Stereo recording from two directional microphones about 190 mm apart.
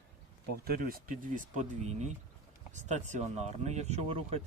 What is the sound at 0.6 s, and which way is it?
Speech, 50° right (ahead or behind).